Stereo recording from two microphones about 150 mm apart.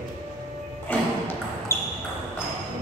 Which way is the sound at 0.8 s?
15° left (ahead or behind).